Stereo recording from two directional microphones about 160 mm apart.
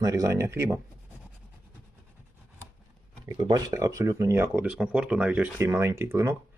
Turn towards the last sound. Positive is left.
turn(degrees=-15)  # may be behind; listen again after turning